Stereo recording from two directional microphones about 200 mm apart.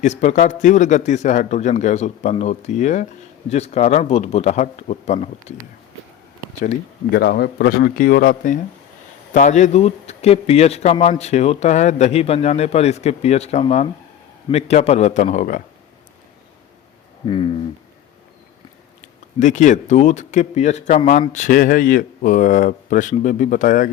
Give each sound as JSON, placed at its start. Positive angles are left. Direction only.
{"t": 0.0, "sound": "speech", "side_deg": 35}
{"t": 7.1, "sound": "a man's voice", "side_deg": 55}
{"t": 17.2, "sound": "speech", "side_deg": 25}
{"t": 19.0, "sound": "speech", "side_deg": 35}